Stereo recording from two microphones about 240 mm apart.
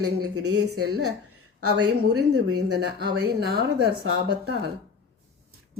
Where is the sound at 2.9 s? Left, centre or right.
Right.